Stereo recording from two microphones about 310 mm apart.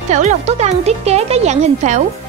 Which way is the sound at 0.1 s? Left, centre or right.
Right.